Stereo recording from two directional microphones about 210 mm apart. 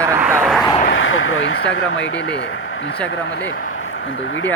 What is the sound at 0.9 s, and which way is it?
Speech, 70° left (ahead or behind).